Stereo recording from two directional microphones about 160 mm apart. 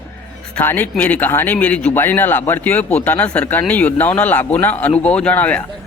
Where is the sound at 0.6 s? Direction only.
15° left (ahead or behind).